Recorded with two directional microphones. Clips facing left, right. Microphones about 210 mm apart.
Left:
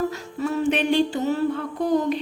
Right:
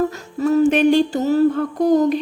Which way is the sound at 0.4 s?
40° right (ahead or behind).